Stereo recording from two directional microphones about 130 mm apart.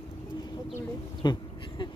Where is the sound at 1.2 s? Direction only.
35° left (ahead or behind).